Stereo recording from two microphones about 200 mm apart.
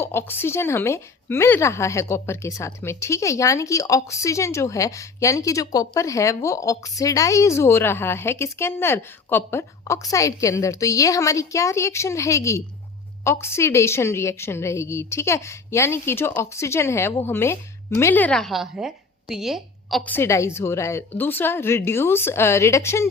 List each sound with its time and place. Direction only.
0.0 s a woman's voice: 10° left (ahead or behind)
20.1 s a woman's voice: 10° left (ahead or behind)